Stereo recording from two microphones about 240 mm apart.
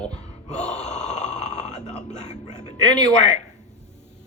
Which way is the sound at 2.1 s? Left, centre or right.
Left.